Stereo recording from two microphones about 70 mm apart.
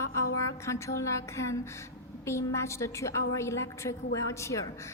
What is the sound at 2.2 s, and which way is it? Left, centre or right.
A woman's voice, left.